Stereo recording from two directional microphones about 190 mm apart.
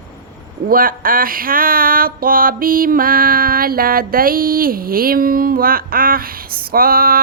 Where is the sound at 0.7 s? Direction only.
50° right (ahead or behind).